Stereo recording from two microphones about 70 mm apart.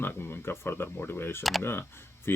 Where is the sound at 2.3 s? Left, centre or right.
Left.